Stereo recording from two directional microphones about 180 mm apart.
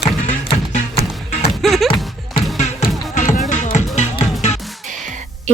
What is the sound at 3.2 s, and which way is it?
Music, 50° left (ahead or behind).